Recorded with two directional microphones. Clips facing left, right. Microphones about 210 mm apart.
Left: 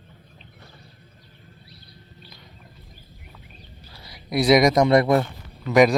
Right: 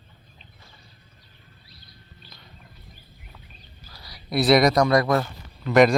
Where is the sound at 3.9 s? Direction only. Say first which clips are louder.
Left 1 dB; 25° left (ahead or behind).